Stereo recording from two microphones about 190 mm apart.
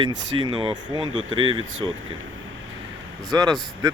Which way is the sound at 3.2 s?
20° right (ahead or behind).